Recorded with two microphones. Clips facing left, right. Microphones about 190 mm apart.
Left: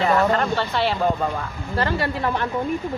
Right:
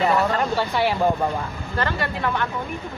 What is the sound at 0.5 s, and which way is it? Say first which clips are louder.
Speech: right 1 dB; 10° right (ahead or behind).